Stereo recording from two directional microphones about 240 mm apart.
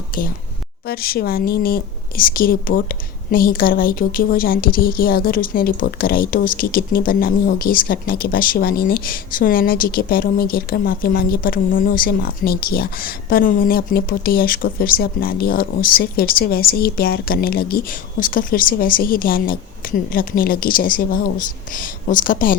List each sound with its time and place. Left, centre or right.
0.9 s a woman's voice: left